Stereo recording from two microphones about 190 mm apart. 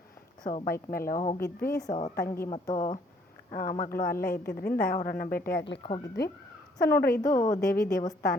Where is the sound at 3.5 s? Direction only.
50° left (ahead or behind).